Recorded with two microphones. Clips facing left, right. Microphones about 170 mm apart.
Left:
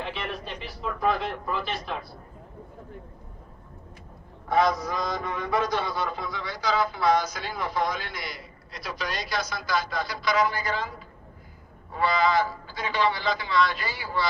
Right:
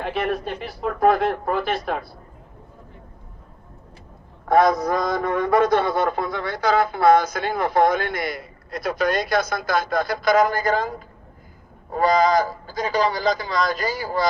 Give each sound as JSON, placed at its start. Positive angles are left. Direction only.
{"t": 0.0, "sound": "a man's voice", "side_deg": -50}
{"t": 4.4, "sound": "a man's voice", "side_deg": -50}